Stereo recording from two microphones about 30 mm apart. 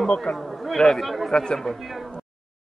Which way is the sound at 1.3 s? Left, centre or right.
Left.